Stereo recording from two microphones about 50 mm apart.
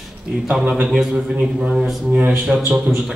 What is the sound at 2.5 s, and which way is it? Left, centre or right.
Speech, right.